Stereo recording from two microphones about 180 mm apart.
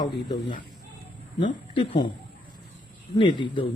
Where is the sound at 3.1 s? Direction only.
25° left (ahead or behind).